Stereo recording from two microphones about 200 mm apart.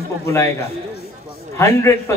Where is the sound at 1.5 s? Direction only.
15° left (ahead or behind).